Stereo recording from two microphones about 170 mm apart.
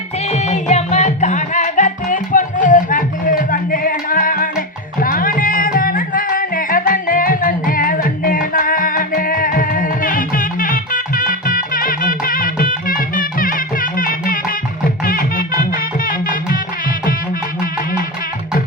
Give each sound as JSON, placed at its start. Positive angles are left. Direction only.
{"t": 0.3, "sound": "music", "side_deg": 40}